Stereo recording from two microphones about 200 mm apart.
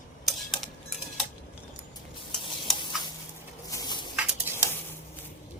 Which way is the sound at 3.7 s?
20° left (ahead or behind).